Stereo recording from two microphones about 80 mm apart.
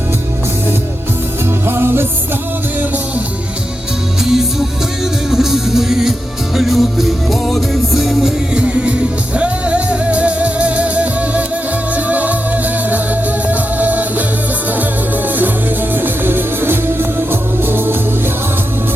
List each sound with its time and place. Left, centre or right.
1.5 s music: right
4.2 s music: centre
8.5 s music: centre